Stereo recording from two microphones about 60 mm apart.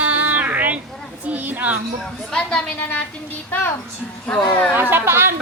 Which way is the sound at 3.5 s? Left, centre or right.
Left.